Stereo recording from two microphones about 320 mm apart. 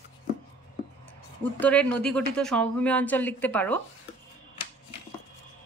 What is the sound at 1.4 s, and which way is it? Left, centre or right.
Speech, centre.